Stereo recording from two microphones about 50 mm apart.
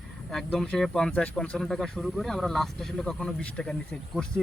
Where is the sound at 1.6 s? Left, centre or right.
Centre.